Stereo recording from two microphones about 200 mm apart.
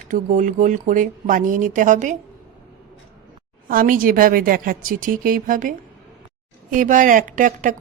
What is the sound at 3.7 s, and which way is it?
A woman's voice, 45° right (ahead or behind).